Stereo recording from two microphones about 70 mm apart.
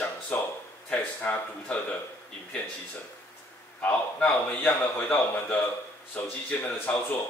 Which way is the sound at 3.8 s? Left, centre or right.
Centre.